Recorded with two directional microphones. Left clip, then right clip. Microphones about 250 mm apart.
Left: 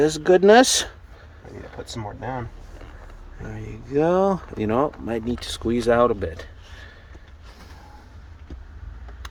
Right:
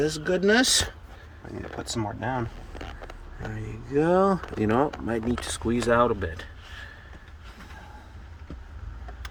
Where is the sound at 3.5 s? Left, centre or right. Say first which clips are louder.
Left 3 dB; centre.